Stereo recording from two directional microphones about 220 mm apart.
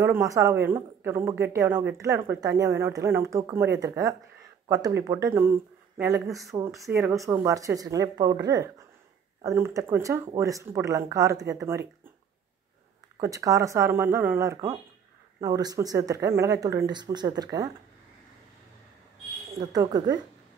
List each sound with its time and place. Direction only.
0.0 s speech: 15° right (ahead or behind)
13.2 s speech: 15° right (ahead or behind)
19.6 s speech: 15° right (ahead or behind)